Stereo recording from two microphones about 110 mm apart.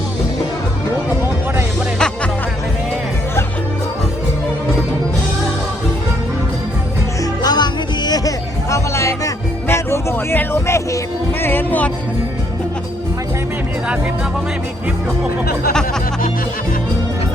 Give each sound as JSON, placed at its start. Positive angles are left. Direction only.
{"t": 2.0, "sound": "music", "side_deg": 5}
{"t": 7.4, "sound": "music", "side_deg": 40}
{"t": 8.7, "sound": "music", "side_deg": 30}